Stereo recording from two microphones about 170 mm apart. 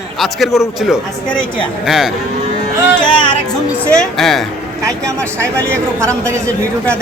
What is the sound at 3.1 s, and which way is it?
Music, 30° left (ahead or behind).